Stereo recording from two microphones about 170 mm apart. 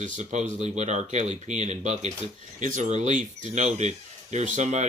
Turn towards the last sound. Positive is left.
turn(degrees=-45)  # may be behind; listen again after turning